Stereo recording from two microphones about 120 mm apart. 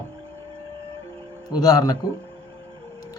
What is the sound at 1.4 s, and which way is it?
Speech, 30° left (ahead or behind).